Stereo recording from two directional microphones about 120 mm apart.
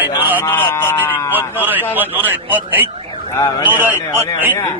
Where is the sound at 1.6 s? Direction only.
15° right (ahead or behind).